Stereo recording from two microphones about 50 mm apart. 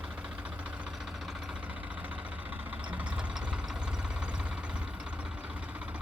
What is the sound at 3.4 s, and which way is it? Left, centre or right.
Engine knocking, centre.